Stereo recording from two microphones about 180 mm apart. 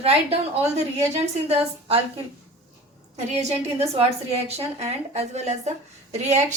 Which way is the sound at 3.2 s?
35° right (ahead or behind).